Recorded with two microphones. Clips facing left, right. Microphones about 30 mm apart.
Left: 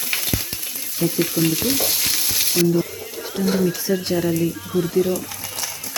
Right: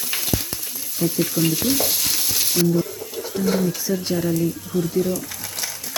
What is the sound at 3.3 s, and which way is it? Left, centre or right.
Speech, left.